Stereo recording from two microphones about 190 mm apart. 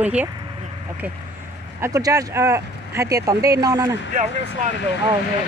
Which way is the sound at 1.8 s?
15° right (ahead or behind).